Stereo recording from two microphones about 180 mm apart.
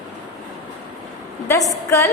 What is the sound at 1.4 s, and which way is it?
Speech, 15° left (ahead or behind).